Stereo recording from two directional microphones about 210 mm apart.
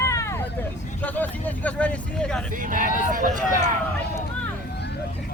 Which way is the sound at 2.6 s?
40° right (ahead or behind).